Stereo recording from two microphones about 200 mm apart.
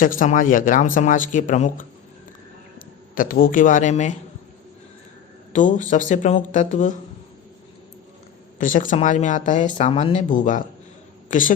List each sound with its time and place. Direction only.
0.0 s a man's voice: 40° left (ahead or behind)
5.5 s speech: 40° left (ahead or behind)
8.5 s a woman's voice: 40° left (ahead or behind)